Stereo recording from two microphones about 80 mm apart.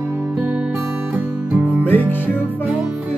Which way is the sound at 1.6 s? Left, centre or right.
Left.